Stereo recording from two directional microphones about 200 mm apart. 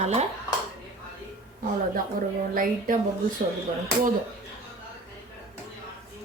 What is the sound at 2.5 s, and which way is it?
Speech, 45° right (ahead or behind).